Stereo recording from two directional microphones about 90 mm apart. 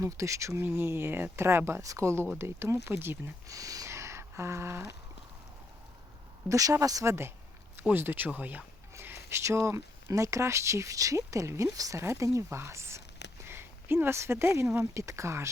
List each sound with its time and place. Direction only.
0.0 s speech: 35° right (ahead or behind)
3.5 s a sound: 40° right (ahead or behind)
6.5 s speech: 40° right (ahead or behind)